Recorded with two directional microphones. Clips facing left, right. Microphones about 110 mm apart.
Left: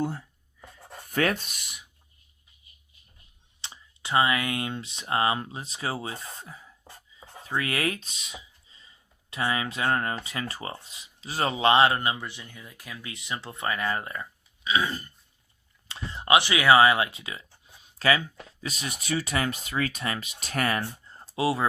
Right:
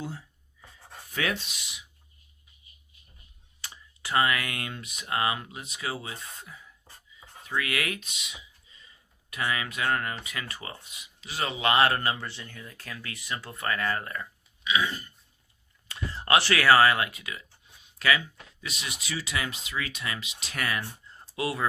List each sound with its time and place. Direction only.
1.1 s speech: 50° left (ahead or behind)
3.6 s speech: 20° left (ahead or behind)
7.2 s a sound: 35° left (ahead or behind)
9.3 s speech: 30° left (ahead or behind)
14.6 s throat clearing: 35° left (ahead or behind)
15.9 s speech: 20° left (ahead or behind)